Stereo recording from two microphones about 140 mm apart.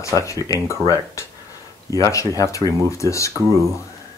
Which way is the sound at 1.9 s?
20° left (ahead or behind).